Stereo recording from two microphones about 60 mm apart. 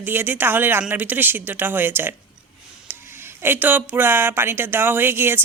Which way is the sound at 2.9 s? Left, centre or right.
Right.